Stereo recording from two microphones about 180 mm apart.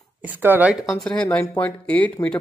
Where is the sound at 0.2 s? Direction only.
10° right (ahead or behind).